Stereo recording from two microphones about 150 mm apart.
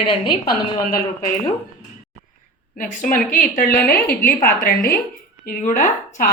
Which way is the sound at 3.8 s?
90° left.